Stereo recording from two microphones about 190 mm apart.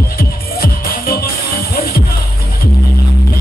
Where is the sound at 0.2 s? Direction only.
50° left (ahead or behind).